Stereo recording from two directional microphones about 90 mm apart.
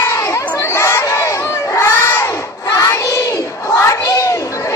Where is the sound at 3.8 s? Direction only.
35° left (ahead or behind).